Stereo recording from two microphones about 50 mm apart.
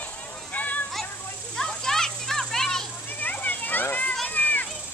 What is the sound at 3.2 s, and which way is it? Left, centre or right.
Children playing, left.